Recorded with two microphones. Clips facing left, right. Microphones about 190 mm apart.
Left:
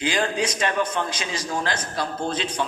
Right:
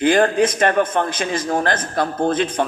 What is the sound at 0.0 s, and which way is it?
A man's voice, 55° right (ahead or behind).